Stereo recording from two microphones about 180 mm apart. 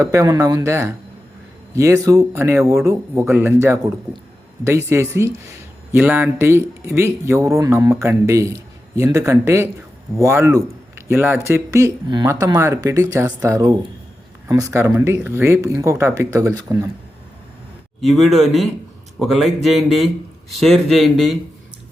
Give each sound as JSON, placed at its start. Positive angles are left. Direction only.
{"t": 0.0, "sound": "speech", "side_deg": -20}
{"t": 18.0, "sound": "speech", "side_deg": 0}